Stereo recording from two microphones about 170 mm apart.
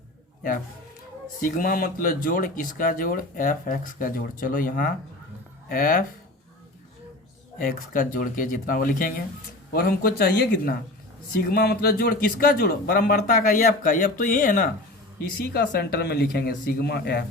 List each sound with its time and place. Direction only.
1.4 s speech: 55° left (ahead or behind)
7.6 s speech: 55° left (ahead or behind)
15.2 s speech: 70° left (ahead or behind)